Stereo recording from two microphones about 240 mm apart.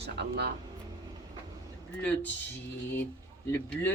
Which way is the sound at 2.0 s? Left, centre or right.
Centre.